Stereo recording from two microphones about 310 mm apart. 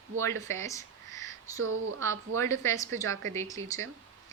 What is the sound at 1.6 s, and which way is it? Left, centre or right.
Speech, right.